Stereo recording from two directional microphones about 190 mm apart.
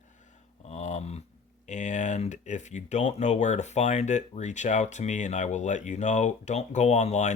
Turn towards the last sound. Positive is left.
turn(degrees=35)  # may be behind; listen again after turning